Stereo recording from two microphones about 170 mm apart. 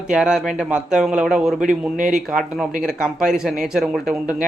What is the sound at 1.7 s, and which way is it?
Speech, 50° right (ahead or behind).